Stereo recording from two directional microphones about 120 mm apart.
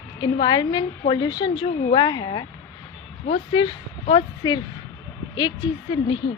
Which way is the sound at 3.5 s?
40° left (ahead or behind).